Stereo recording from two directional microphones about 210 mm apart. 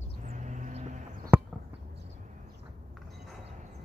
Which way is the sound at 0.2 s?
35° right (ahead or behind).